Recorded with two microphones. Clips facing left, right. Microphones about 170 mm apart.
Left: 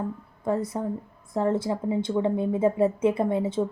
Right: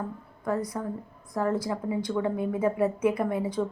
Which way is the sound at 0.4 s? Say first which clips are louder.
Left 3 dB; 25° left (ahead or behind).